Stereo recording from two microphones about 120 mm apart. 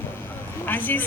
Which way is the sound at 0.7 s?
15° left (ahead or behind).